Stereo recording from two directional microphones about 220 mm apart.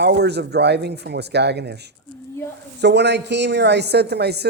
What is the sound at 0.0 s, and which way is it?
Speech, 50° right (ahead or behind).